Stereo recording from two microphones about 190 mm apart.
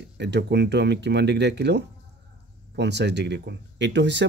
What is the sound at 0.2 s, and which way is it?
Speech, 65° right (ahead or behind).